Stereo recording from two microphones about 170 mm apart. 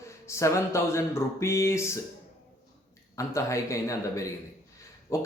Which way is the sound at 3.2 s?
20° left (ahead or behind).